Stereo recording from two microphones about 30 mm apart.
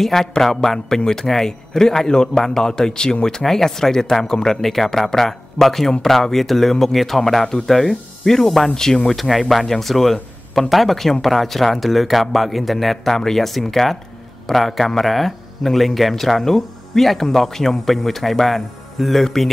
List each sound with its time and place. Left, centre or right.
0.0 s speech: centre
9.1 s speech: centre